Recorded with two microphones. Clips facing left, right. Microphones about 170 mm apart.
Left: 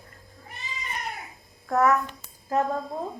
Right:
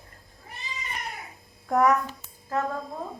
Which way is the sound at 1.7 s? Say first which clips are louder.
Even; 15° right (ahead or behind).